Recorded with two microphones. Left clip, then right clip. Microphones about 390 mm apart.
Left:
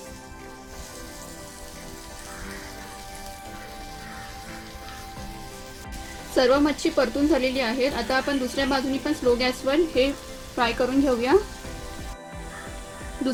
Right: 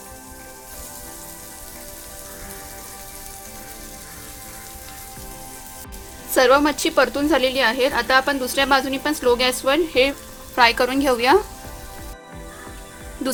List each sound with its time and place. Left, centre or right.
6.3 s a woman's voice: right